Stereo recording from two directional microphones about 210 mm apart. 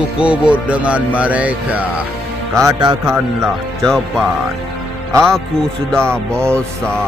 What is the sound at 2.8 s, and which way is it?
Music, 15° right (ahead or behind).